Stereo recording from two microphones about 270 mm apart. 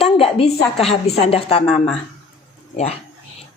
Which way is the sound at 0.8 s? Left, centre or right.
Left.